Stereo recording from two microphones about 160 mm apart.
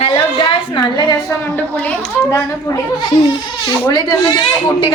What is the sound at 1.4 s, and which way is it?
Speech, 10° left (ahead or behind).